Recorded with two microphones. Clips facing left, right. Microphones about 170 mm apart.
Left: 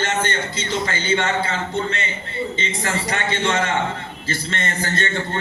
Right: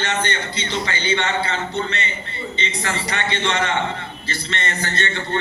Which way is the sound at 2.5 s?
45° left (ahead or behind).